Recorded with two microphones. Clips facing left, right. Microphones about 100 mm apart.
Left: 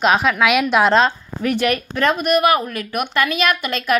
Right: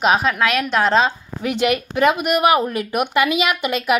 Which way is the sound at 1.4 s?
20° right (ahead or behind).